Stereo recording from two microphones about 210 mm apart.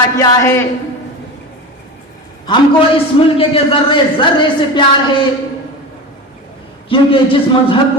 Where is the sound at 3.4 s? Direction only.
25° left (ahead or behind).